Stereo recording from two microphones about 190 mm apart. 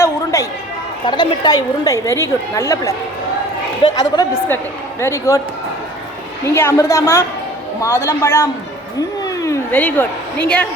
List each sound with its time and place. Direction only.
0.0 s chatter: 15° left (ahead or behind)
1.0 s a woman's voice: 25° left (ahead or behind)
3.9 s a woman's voice: 20° left (ahead or behind)
6.4 s a woman's voice: 15° left (ahead or behind)